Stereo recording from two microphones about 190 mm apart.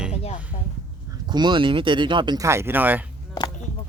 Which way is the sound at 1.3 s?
25° right (ahead or behind).